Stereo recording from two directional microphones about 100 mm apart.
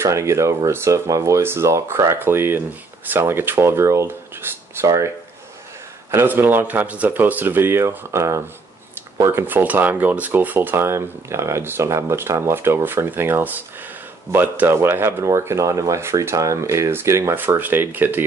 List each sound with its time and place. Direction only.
0.0 s speech: 30° right (ahead or behind)
6.1 s speech: 20° right (ahead or behind)